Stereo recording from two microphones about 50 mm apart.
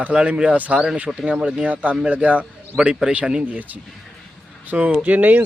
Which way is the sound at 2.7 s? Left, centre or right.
Left.